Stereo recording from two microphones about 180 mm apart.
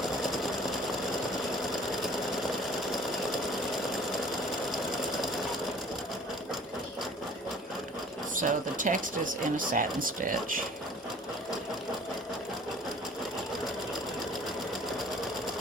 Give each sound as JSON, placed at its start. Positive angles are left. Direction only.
{"t": 8.4, "sound": "speech", "side_deg": -45}